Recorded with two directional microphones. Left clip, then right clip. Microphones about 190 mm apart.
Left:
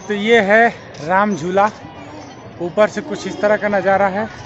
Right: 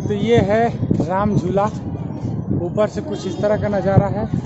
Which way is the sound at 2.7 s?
5° right (ahead or behind).